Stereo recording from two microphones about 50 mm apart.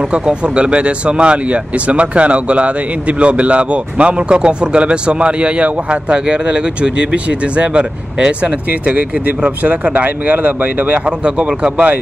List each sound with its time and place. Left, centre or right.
0.1 s speech: right
11.2 s speech: right